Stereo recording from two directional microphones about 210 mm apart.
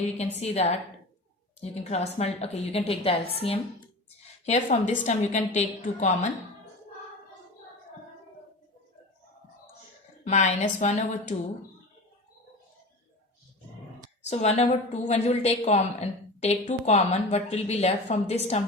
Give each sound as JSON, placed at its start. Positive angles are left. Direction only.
{"t": 0.3, "sound": "a woman's voice", "side_deg": 30}
{"t": 10.2, "sound": "a woman's voice", "side_deg": 35}
{"t": 14.3, "sound": "a woman's voice", "side_deg": 30}